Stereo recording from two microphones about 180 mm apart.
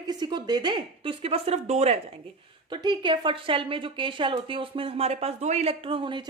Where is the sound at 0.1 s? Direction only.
25° right (ahead or behind).